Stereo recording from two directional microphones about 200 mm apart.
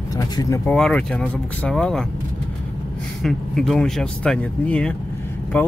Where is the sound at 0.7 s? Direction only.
5° left (ahead or behind).